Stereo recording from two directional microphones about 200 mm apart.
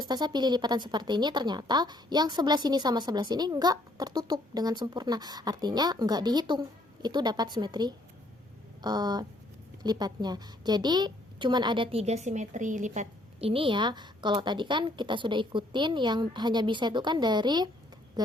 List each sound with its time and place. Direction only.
0.0 s a woman's voice: 20° right (ahead or behind)